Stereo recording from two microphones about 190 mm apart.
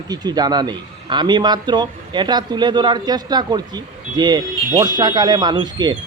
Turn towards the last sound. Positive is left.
turn(degrees=-25)  # may be behind; listen again after turning